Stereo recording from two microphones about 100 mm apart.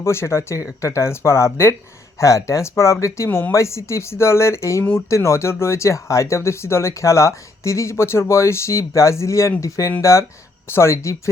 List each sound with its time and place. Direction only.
0.0 s speech: 25° left (ahead or behind)
3.2 s speech: 20° left (ahead or behind)
3.5 s speech: 30° left (ahead or behind)